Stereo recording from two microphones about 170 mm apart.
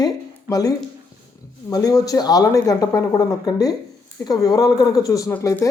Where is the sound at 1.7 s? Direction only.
20° left (ahead or behind).